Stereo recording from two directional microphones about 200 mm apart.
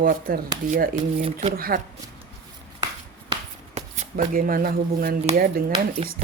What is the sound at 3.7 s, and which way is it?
Speech, 35° right (ahead or behind).